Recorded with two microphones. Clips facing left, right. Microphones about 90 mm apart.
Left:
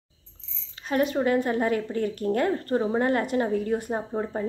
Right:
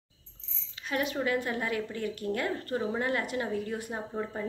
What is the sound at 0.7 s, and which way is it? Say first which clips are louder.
A woman's voice: left 7 dB; 35° left (ahead or behind).